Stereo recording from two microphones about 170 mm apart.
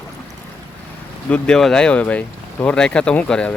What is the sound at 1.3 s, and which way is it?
Speech, 5° left (ahead or behind).